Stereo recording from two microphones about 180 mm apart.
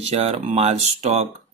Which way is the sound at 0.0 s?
35° right (ahead or behind).